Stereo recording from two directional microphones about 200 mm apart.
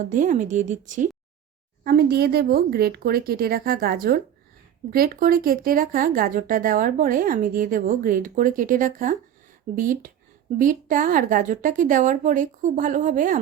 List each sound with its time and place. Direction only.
0.0 s a woman's voice: 40° right (ahead or behind)
1.8 s a woman's voice: 50° right (ahead or behind)